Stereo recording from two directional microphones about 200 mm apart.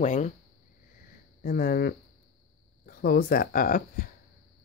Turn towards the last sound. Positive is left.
turn(degrees=45)  # may be behind; listen again after turning